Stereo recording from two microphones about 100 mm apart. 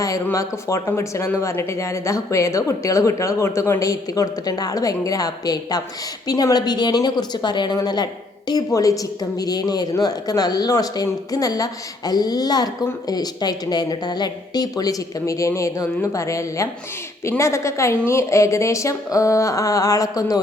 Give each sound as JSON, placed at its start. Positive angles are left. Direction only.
{"t": 0.3, "sound": "a woman's voice", "side_deg": 30}